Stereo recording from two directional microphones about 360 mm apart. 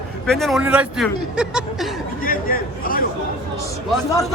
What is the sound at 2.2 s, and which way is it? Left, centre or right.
Speech, left.